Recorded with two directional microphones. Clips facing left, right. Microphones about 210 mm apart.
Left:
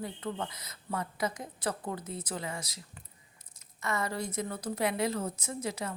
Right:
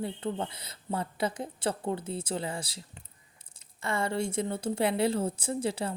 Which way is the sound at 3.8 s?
30° right (ahead or behind).